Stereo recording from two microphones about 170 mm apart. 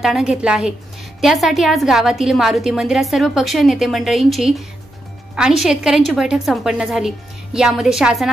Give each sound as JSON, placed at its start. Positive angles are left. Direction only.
{"t": 0.0, "sound": "a woman's voice", "side_deg": -5}